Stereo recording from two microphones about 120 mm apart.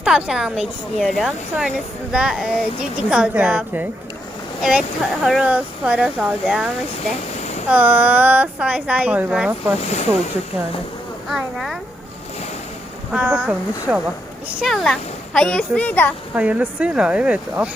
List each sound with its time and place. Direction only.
0.0 s speech: 5° right (ahead or behind)
7.7 s speech: 15° right (ahead or behind)
9.8 s speech: 70° left (ahead or behind)
11.3 s speech: centre (ahead or behind)
13.1 s speech: 15° right (ahead or behind)
14.6 s a child's voice: centre (ahead or behind)
16.3 s speech: 10° right (ahead or behind)